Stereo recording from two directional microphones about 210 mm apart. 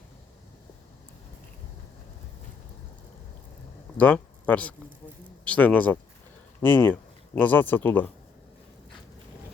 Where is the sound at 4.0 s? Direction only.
5° left (ahead or behind).